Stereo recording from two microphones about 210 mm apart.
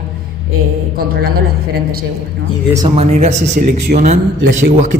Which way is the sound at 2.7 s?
25° right (ahead or behind).